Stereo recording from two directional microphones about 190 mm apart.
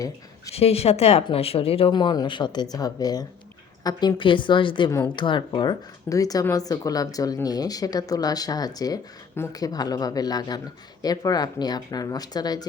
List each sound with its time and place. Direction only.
0.5 s speech: 30° left (ahead or behind)